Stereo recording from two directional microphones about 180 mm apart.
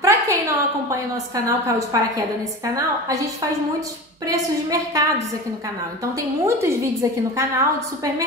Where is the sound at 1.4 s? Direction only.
15° right (ahead or behind).